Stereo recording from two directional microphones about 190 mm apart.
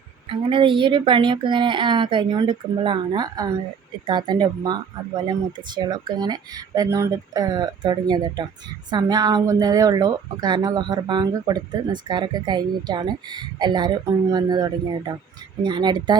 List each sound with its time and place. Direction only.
0.3 s speech: 25° right (ahead or behind)